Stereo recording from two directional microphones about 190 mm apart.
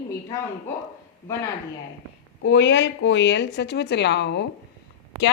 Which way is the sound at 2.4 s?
70° left (ahead or behind).